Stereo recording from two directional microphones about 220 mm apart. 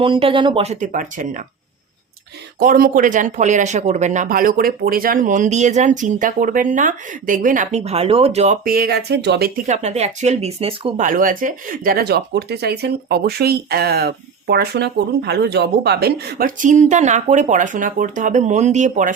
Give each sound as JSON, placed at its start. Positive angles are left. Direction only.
{"t": 0.0, "sound": "speech", "side_deg": -25}
{"t": 2.6, "sound": "speech", "side_deg": -40}
{"t": 9.6, "sound": "speech", "side_deg": -30}